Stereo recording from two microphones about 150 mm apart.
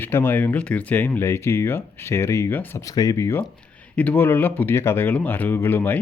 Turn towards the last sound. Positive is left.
turn(degrees=15)  # may be behind; listen again after turning